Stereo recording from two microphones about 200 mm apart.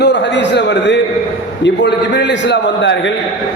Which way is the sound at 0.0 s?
60° left (ahead or behind).